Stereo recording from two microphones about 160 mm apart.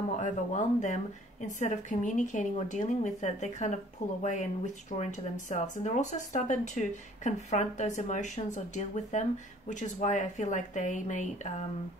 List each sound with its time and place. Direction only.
0.2 s a woman's voice: 50° left (ahead or behind)